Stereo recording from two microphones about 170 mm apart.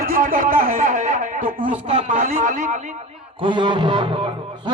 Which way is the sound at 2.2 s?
45° right (ahead or behind).